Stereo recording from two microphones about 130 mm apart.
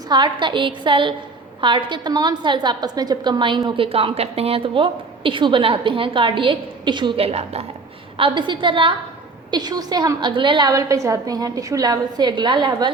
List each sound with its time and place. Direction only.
0.1 s a woman's voice: 35° right (ahead or behind)
7.3 s a woman's voice: 55° right (ahead or behind)
8.2 s a woman's voice: 40° right (ahead or behind)